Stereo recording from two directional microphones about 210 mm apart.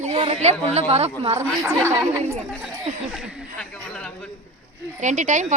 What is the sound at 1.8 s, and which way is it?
Speech, 10° right (ahead or behind).